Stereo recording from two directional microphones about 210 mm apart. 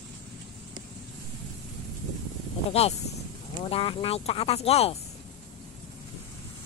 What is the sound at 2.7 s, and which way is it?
Speech, 30° left (ahead or behind).